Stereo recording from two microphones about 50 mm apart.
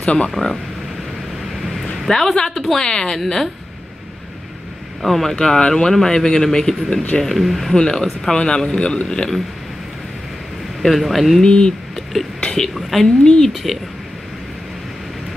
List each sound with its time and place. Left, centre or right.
0.0 s speech: left
2.0 s a woman's voice: centre
5.0 s speech: centre
5.3 s speech: centre
6.9 s speech: left
7.2 s speech: centre
7.7 s speech: centre
10.8 s speech: centre
11.4 s speech: centre
12.4 s a sound: centre
12.7 s speech: centre
13.2 s speech: centre
13.5 s speech: centre